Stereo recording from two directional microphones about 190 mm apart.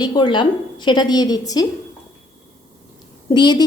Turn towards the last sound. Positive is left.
turn(degrees=25)  # may be behind; listen again after turning